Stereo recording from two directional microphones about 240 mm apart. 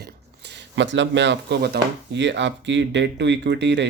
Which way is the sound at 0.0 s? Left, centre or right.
Right.